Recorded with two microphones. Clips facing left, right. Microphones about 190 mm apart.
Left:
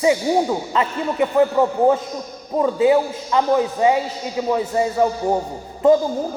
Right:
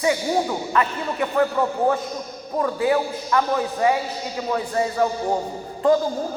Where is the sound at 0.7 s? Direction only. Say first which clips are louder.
Left 2 dB; 20° left (ahead or behind).